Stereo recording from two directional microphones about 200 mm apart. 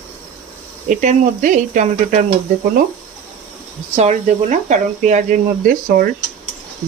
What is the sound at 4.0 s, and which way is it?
Speech, 35° right (ahead or behind).